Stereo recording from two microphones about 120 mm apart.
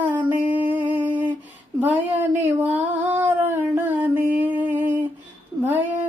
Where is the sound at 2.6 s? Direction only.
15° right (ahead or behind).